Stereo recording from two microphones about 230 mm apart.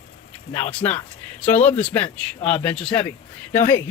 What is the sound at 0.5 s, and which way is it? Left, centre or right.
Speech, centre.